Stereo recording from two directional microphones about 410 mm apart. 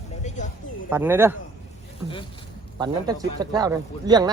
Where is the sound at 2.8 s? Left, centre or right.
Centre.